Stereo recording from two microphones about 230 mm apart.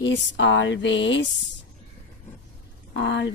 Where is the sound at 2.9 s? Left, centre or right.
Left.